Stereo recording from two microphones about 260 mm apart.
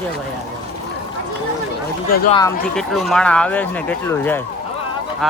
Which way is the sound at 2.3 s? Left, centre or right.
Centre.